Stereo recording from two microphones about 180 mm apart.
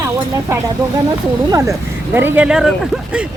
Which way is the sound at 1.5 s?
15° right (ahead or behind).